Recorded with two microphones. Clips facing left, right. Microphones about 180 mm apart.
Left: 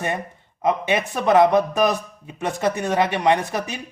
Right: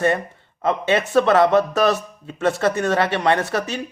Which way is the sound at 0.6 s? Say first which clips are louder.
Right 1 dB; 15° left (ahead or behind).